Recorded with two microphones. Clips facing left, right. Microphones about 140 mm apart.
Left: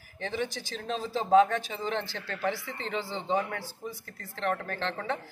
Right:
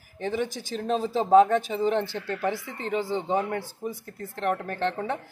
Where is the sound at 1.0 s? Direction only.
15° right (ahead or behind).